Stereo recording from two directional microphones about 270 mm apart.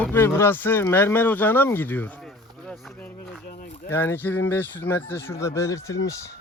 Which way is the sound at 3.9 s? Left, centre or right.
Centre.